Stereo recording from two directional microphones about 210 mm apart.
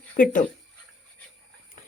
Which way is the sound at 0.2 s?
40° left (ahead or behind).